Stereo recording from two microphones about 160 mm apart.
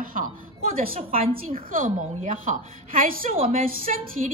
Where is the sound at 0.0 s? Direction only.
60° right (ahead or behind).